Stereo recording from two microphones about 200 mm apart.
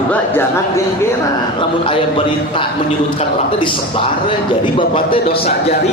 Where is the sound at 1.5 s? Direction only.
25° left (ahead or behind).